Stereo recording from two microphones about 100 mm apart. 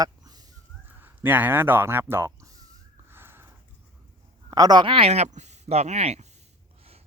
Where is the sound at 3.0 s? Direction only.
25° right (ahead or behind).